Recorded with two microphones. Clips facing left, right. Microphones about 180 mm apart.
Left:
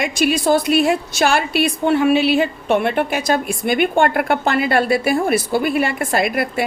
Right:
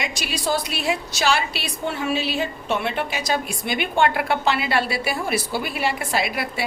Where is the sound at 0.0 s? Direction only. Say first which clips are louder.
Left 10 dB; 55° left (ahead or behind).